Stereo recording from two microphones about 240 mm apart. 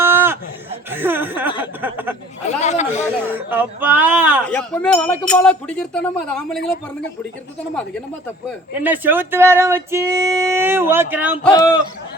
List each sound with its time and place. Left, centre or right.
0.0 s a sound: centre
0.9 s speech: centre
2.6 s a sound: left
3.2 s speech: centre
4.4 s speech: centre
8.7 s speech: centre